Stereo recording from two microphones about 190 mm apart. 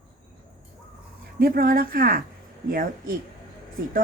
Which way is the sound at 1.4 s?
50° right (ahead or behind).